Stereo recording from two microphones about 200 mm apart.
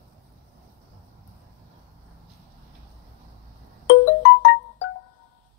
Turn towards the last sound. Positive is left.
turn(degrees=65)  # may be behind; listen again after turning